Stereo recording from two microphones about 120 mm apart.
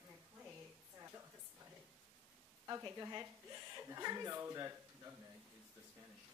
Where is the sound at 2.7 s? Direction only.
25° right (ahead or behind).